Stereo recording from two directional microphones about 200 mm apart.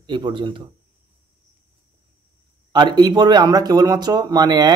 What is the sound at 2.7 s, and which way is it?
A man's voice, 20° right (ahead or behind).